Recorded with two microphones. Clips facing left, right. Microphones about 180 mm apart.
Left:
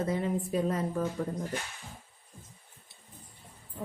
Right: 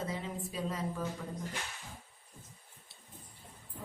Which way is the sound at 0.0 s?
55° left (ahead or behind).